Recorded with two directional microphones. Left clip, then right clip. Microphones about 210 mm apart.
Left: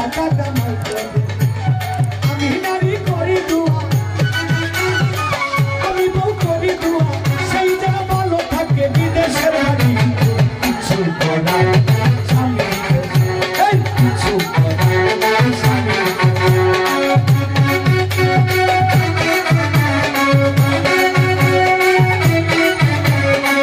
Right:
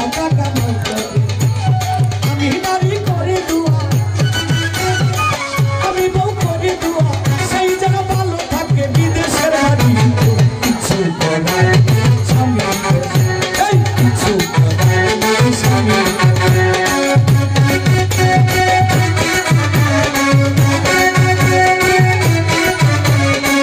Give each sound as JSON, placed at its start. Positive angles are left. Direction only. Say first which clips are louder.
{"t": 8.9, "sound": "music", "louder": "even", "side_deg": -55}
{"t": 11.4, "sound": "music", "louder": "right 1 dB", "side_deg": -55}
{"t": 13.4, "sound": "music", "louder": "left 1 dB", "side_deg": -55}